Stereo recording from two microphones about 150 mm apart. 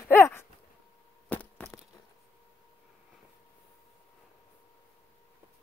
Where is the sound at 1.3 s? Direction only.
10° left (ahead or behind).